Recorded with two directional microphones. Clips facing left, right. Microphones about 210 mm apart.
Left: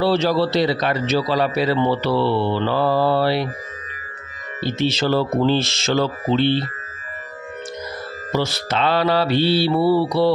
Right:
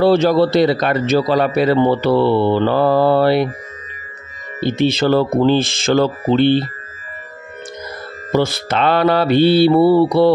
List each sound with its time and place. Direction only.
0.0 s a man's voice: 50° right (ahead or behind)
4.6 s a man's voice: 55° right (ahead or behind)
8.3 s a man's voice: 55° right (ahead or behind)